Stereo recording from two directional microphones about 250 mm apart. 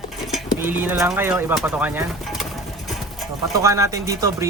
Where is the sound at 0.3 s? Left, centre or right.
Centre.